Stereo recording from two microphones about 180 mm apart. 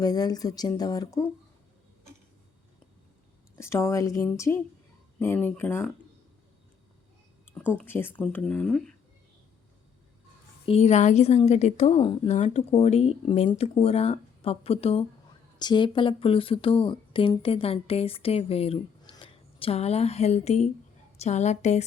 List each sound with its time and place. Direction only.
0.0 s speech: 20° left (ahead or behind)
3.5 s speech: 15° left (ahead or behind)
7.7 s speech: 10° left (ahead or behind)
10.7 s speech: 40° left (ahead or behind)
12.4 s speech: 40° left (ahead or behind)